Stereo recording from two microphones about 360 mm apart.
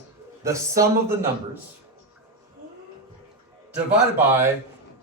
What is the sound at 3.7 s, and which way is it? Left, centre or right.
Speech, centre.